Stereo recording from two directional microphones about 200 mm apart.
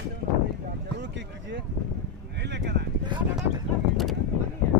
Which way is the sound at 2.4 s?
60° right (ahead or behind).